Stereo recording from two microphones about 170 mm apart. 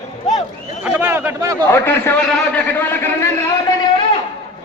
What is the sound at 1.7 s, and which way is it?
A man's voice, 15° left (ahead or behind).